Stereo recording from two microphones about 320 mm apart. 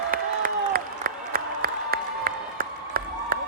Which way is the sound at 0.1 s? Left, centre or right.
Right.